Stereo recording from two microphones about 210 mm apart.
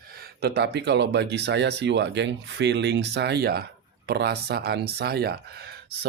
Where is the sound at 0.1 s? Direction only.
50° right (ahead or behind).